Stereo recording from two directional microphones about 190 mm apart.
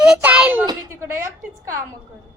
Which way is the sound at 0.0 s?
5° right (ahead or behind).